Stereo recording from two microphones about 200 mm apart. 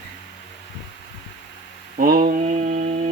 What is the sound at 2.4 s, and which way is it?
Mantra, 35° right (ahead or behind).